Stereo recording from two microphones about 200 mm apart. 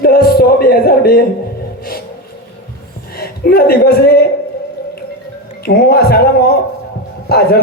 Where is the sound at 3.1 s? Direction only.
50° left (ahead or behind).